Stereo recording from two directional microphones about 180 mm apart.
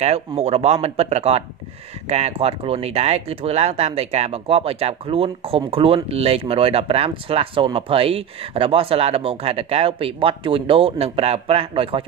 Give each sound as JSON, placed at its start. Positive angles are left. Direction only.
{"t": 0.0, "sound": "speech", "side_deg": -35}